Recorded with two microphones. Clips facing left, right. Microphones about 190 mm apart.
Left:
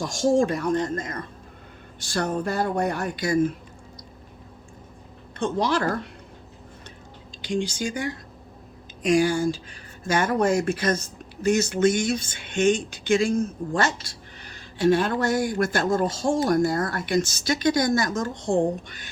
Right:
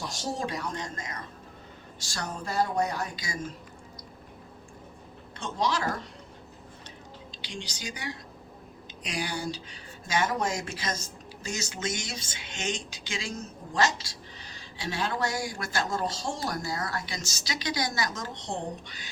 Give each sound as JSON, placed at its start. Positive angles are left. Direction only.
{"t": 0.0, "sound": "speech", "side_deg": 50}
{"t": 5.4, "sound": "speech", "side_deg": 55}
{"t": 7.4, "sound": "speech", "side_deg": 50}